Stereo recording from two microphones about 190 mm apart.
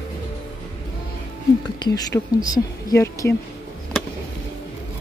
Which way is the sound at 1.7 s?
20° left (ahead or behind).